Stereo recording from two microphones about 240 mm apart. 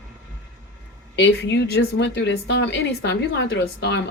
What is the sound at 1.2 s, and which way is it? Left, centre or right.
Speech, left.